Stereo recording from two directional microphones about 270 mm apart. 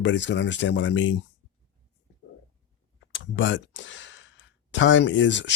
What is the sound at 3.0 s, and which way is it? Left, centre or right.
Speech, left.